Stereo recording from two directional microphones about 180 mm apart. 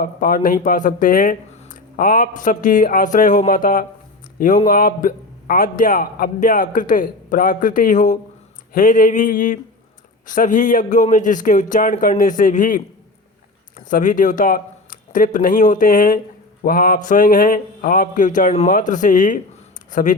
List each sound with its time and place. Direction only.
0.0 s a man's voice: 50° left (ahead or behind)
13.9 s a man's voice: 45° left (ahead or behind)